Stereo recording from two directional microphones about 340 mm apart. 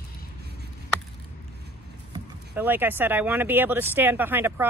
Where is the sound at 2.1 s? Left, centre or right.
Centre.